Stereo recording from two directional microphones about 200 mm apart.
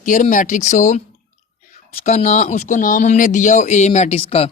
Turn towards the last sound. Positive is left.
turn(degrees=30)  # may be behind; listen again after turning